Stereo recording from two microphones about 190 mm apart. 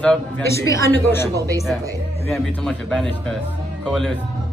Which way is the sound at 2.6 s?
5° left (ahead or behind).